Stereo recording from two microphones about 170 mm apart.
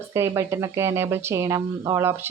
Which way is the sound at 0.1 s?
15° right (ahead or behind).